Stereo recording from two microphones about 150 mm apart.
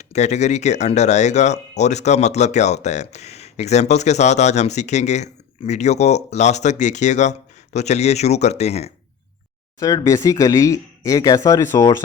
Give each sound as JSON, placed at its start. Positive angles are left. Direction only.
{"t": 0.0, "sound": "speech", "side_deg": 50}
{"t": 9.8, "sound": "speech", "side_deg": 20}